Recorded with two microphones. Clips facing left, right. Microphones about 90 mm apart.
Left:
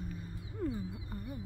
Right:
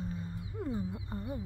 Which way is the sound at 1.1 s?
25° right (ahead or behind).